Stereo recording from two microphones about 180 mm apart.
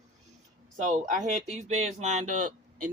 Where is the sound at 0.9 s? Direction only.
45° right (ahead or behind).